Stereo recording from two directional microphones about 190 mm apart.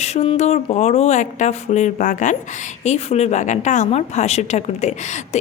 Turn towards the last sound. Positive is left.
turn(degrees=35)  # may be behind; listen again after turning